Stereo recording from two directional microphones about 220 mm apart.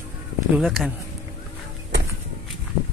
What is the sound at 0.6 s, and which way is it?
Speech, centre (ahead or behind).